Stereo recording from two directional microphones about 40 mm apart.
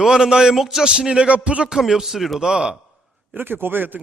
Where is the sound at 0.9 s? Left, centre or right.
Right.